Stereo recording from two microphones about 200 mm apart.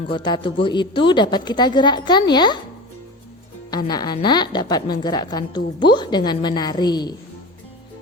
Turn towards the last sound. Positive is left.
turn(degrees=20)  # may be behind; listen again after turning